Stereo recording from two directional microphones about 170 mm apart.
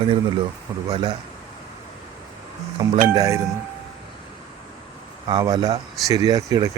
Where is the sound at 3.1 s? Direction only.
15° right (ahead or behind).